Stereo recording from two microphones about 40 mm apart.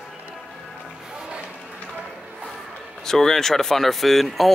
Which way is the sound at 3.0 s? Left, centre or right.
Centre.